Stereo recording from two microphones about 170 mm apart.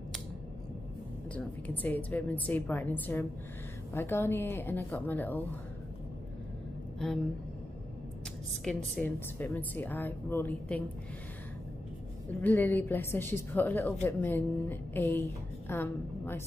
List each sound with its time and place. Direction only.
1.3 s a woman's voice: 10° left (ahead or behind)
8.6 s a woman's voice: 5° left (ahead or behind)
12.4 s a woman's voice: 10° left (ahead or behind)